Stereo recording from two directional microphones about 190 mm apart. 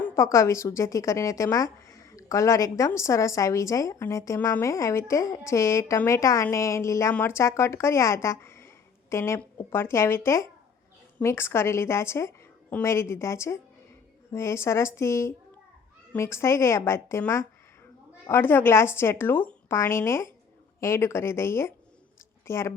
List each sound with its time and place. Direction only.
0.0 s a woman's voice: 15° left (ahead or behind)